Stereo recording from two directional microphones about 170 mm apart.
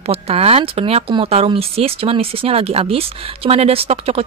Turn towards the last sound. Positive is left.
turn(degrees=-35)  # may be behind; listen again after turning